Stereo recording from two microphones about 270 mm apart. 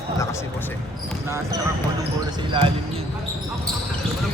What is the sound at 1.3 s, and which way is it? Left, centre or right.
Speech, centre.